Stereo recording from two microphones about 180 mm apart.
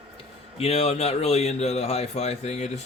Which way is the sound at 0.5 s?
35° left (ahead or behind).